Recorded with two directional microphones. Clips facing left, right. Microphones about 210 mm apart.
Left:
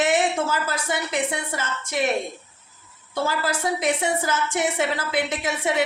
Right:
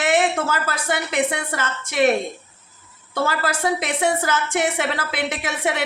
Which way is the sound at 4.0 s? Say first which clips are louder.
Right 3 dB; 80° right.